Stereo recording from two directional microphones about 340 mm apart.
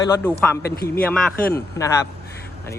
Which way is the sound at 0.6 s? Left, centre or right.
Left.